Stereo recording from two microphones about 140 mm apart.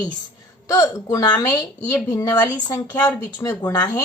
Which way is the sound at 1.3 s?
15° left (ahead or behind).